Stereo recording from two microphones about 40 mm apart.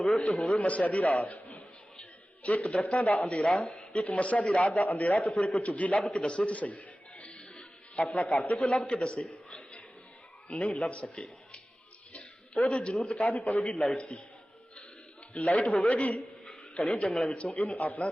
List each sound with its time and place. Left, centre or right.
0.2 s a man's voice: left
6.0 s a man's voice: centre
6.2 s music: left
8.8 s a man's voice: left
15.3 s a man's voice: left